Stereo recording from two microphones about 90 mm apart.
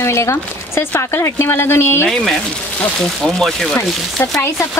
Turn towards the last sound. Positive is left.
turn(degrees=5)  # may be behind; listen again after turning